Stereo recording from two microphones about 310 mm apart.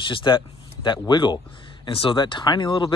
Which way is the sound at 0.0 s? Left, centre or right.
Centre.